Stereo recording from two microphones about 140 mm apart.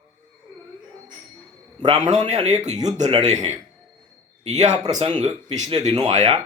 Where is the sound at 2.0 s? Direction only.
55° right (ahead or behind).